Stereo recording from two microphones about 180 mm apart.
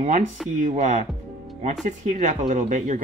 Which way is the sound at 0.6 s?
45° right (ahead or behind).